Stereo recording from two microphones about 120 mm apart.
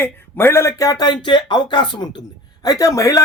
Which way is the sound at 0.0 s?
20° left (ahead or behind).